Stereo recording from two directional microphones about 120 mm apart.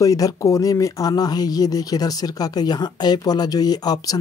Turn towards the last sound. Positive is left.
turn(degrees=30)  # may be behind; listen again after turning